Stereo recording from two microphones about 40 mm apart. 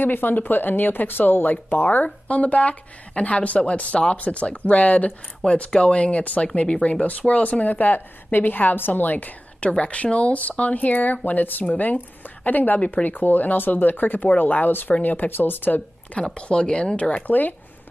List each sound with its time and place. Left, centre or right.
0.0 s a woman's voice: left
5.4 s speech: left
5.8 s a woman's voice: left
9.7 s a woman's voice: left
16.3 s speech: left